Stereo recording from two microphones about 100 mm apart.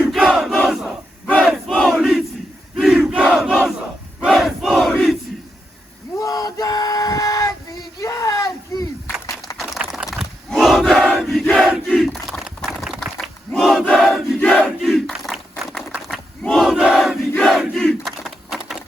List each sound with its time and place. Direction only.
0.1 s crowd: centre (ahead or behind)
6.1 s a sound: 35° left (ahead or behind)
9.6 s battle cry: centre (ahead or behind)
13.9 s crowd: centre (ahead or behind)
14.8 s battle cry: centre (ahead or behind)
15.3 s a sound: 5° right (ahead or behind)
16.6 s crowd: 5° right (ahead or behind)
17.6 s battle cry: centre (ahead or behind)